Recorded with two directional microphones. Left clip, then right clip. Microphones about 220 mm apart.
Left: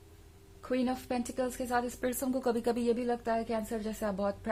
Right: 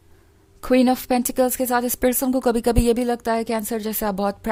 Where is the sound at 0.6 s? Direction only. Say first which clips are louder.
Right 15 dB; 50° right (ahead or behind).